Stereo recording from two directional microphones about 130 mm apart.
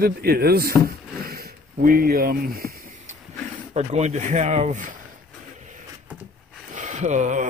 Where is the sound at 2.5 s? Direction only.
90° right.